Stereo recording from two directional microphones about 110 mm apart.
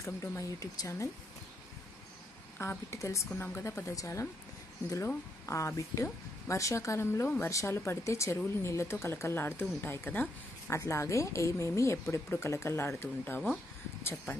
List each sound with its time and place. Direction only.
0.0 s speech: 25° left (ahead or behind)
2.6 s speech: 25° left (ahead or behind)